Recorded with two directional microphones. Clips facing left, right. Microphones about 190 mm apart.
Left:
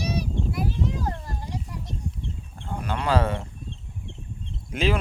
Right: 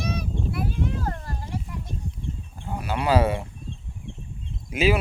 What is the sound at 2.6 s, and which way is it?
Speech, 10° right (ahead or behind).